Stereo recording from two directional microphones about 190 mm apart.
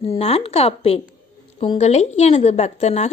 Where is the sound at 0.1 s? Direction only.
30° left (ahead or behind).